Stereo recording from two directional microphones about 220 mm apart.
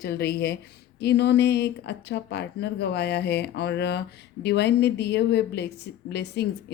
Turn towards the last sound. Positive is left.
turn(degrees=50)  # may be behind; listen again after turning